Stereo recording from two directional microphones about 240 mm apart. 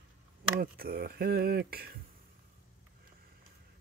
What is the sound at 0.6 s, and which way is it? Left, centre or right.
Speech, right.